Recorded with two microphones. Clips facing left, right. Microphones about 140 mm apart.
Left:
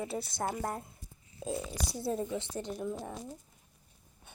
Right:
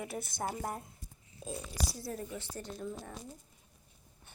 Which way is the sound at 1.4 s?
60° left (ahead or behind).